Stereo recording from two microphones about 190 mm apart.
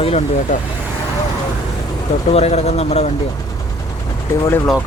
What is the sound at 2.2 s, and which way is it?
Speech, 35° left (ahead or behind).